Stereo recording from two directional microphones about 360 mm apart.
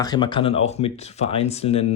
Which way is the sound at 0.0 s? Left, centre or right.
Centre.